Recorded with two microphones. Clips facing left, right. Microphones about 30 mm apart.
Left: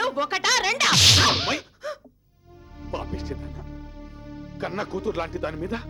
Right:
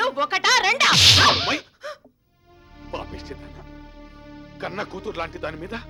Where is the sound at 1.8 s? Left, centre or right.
Right.